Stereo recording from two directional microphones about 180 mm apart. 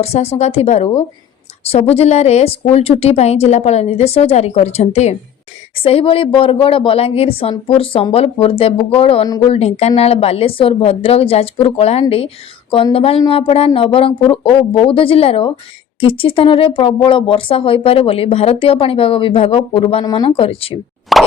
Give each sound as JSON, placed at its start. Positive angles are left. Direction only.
{"t": 0.0, "sound": "speech", "side_deg": 35}
{"t": 21.1, "sound": "plop", "side_deg": 0}